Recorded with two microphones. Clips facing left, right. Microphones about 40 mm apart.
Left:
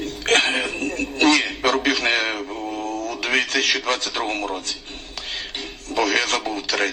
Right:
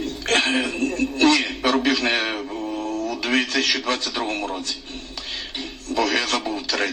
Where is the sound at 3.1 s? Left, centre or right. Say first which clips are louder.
Left 1 dB; left.